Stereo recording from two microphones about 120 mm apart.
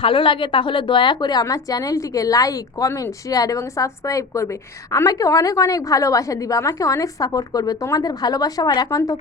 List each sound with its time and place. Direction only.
0.0 s a woman's voice: 45° left (ahead or behind); by 9.1 s 30° left (ahead or behind)